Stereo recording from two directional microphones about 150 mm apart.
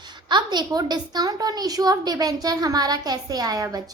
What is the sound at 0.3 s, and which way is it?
A woman's voice, 30° right (ahead or behind).